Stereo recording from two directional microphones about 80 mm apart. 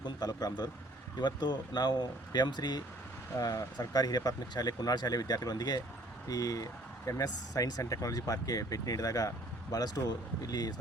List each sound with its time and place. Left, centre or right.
0.0 s speech: left
3.3 s speech: left